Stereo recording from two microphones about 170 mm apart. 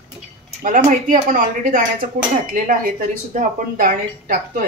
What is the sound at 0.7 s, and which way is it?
Speech, 45° right (ahead or behind).